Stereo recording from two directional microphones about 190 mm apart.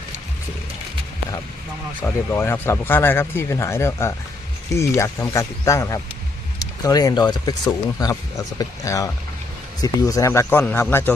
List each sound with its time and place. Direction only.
2.0 s speech: 10° left (ahead or behind)